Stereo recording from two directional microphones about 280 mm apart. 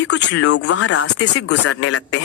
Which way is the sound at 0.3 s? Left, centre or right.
Left.